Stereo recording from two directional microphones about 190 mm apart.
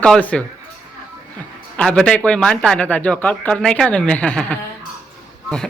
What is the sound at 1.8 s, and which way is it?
Speech, 5° left (ahead or behind).